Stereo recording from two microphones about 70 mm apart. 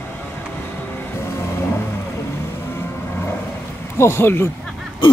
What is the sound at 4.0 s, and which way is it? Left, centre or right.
Speech, left.